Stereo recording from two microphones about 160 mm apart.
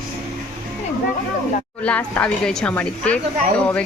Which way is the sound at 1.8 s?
10° left (ahead or behind).